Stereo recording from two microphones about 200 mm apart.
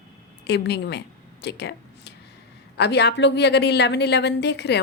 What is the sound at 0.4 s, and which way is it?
A woman's voice, 55° left (ahead or behind).